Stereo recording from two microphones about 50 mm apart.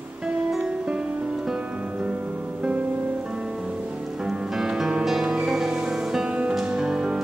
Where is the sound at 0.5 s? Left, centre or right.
Centre.